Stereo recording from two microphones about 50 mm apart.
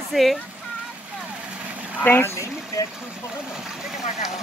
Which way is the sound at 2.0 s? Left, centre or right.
Left.